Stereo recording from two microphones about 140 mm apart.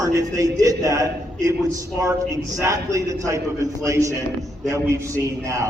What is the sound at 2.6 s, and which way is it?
A man's voice, 20° right (ahead or behind).